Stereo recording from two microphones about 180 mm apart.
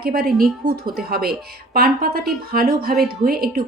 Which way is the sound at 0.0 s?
55° right (ahead or behind).